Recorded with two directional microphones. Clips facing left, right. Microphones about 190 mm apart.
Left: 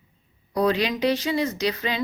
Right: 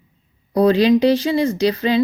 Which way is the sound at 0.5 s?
30° right (ahead or behind).